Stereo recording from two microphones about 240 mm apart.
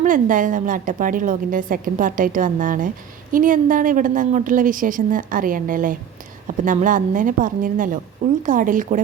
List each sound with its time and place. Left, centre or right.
0.0 s a woman's voice: right